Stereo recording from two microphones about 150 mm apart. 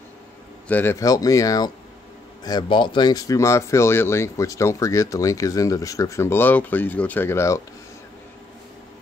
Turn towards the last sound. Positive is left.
turn(degrees=20)  # may be behind; listen again after turning